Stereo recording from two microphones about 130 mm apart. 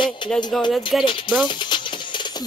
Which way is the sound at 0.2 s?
35° left (ahead or behind).